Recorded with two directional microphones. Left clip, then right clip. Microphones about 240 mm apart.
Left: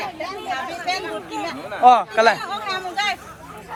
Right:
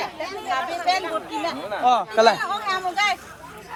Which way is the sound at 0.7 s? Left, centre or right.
Right.